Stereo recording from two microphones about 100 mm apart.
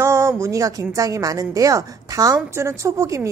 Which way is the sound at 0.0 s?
30° right (ahead or behind).